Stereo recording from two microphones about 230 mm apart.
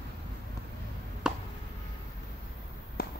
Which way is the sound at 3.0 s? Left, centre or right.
Left.